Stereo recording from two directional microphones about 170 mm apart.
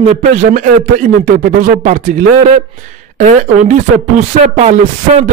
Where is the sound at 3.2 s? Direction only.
45° right (ahead or behind).